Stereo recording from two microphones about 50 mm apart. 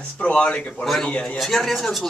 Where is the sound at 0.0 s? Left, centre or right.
Left.